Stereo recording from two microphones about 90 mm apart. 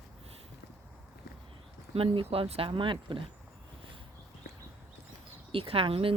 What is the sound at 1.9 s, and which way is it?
Speech, 85° right.